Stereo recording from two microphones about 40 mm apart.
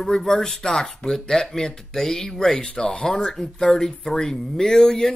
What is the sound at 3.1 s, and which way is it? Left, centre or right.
Speech, centre.